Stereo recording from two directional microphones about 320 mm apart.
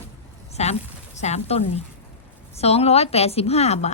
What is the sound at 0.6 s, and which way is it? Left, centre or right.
Speech, left.